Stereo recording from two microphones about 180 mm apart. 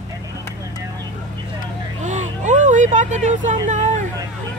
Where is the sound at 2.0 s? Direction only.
40° right (ahead or behind).